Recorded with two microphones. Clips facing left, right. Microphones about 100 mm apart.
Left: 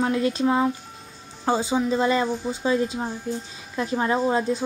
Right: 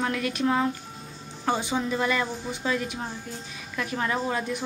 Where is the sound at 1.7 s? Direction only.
25° left (ahead or behind).